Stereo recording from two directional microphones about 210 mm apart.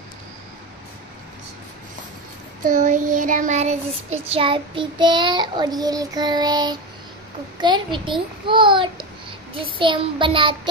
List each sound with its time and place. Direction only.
2.6 s child singing: 40° right (ahead or behind)